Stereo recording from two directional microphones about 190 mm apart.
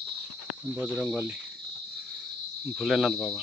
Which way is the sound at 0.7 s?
10° right (ahead or behind).